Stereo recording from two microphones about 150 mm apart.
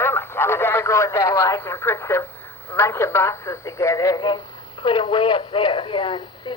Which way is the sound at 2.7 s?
15° left (ahead or behind).